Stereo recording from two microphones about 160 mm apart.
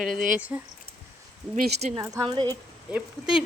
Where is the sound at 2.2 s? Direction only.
30° right (ahead or behind).